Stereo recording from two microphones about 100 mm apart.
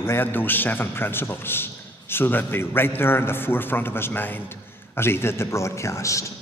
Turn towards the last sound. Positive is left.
turn(degrees=30)  # may be behind; listen again after turning